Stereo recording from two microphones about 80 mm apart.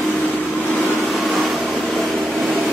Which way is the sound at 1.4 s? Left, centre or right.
Centre.